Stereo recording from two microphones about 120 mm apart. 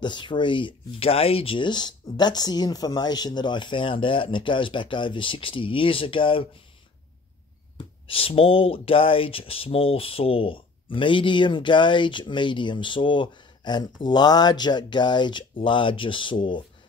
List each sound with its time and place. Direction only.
0.0 s speech: 40° left (ahead or behind)
7.7 s speech: 50° left (ahead or behind)